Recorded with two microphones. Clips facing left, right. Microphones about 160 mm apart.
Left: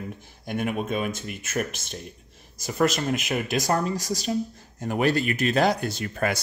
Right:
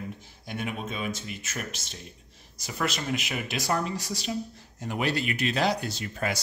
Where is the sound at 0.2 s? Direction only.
50° left (ahead or behind).